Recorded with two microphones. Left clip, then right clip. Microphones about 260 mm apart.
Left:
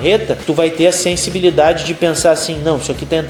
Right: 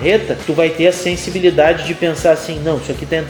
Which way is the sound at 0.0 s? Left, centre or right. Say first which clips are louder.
Left 1 dB; left.